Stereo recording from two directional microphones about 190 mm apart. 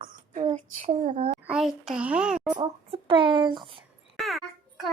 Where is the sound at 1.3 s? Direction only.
5° right (ahead or behind).